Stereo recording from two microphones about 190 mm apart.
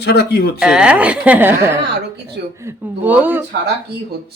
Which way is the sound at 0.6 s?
5° right (ahead or behind).